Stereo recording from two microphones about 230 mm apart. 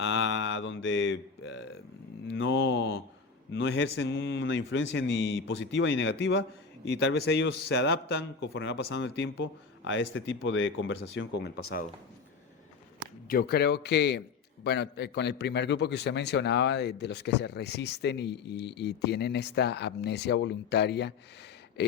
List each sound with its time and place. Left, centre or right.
0.0 s mantra: left
3.5 s a man's voice: left
13.2 s a man's voice: left